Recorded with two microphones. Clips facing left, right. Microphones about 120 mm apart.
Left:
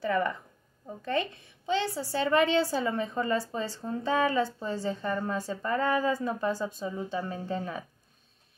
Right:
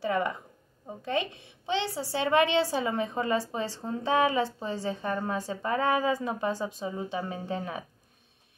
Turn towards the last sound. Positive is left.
turn(degrees=-15)  # may be behind; listen again after turning